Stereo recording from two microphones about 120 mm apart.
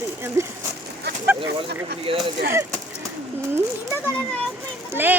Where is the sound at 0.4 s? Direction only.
25° right (ahead or behind).